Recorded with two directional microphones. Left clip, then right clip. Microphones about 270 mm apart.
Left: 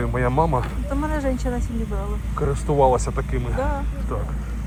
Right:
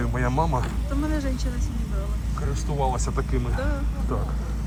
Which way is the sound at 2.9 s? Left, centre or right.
Centre.